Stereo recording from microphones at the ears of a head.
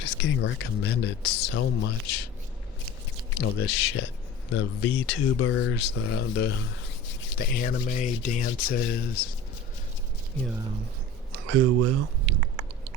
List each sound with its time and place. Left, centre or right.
0.0 s speech: left
11.3 s speech: right